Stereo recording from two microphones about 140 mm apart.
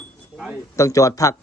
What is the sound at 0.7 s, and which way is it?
Speech, 25° left (ahead or behind).